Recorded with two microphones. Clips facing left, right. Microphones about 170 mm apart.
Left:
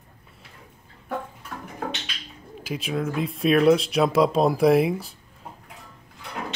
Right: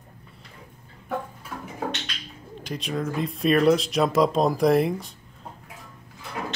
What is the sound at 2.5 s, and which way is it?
Speech, 5° left (ahead or behind).